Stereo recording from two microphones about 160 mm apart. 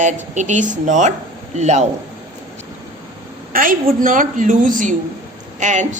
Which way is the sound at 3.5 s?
60° right (ahead or behind).